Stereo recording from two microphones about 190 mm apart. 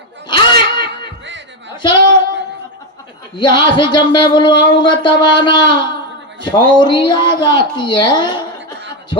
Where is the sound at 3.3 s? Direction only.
25° left (ahead or behind).